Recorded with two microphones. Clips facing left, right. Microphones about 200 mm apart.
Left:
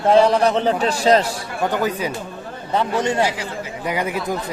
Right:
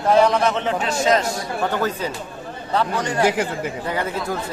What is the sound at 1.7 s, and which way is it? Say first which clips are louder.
A man's voice: left 2 dB; 15° left (ahead or behind).